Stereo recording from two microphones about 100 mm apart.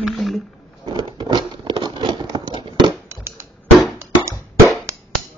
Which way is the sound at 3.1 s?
25° right (ahead or behind).